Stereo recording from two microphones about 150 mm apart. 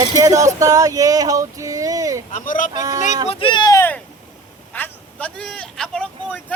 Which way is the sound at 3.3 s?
35° left (ahead or behind).